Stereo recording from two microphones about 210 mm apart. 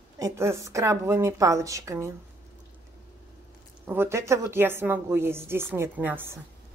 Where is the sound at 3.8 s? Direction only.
10° right (ahead or behind).